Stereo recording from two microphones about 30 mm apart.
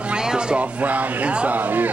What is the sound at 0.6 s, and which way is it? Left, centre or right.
Speech, right.